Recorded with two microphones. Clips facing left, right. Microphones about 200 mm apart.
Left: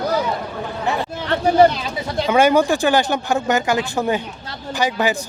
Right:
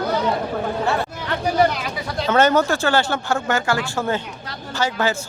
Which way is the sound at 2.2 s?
10° left (ahead or behind).